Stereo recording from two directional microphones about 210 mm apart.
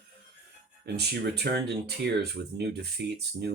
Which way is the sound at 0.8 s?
50° right (ahead or behind).